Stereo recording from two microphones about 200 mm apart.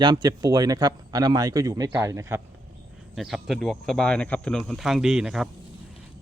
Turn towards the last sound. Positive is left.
turn(degrees=0)  # may be behind; listen again after turning